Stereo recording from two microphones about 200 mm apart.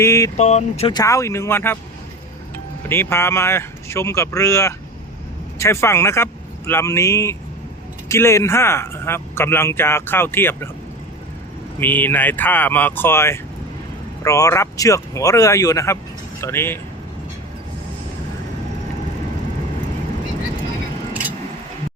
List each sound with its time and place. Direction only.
0.0 s speech: 15° left (ahead or behind)
0.3 s speech: 35° left (ahead or behind)
0.9 s speech: 15° left (ahead or behind)
2.9 s speech: 10° left (ahead or behind)
11.8 s speech: 10° left (ahead or behind)